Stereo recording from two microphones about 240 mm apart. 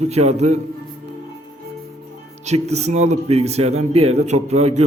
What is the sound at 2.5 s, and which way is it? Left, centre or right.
A man's voice, right.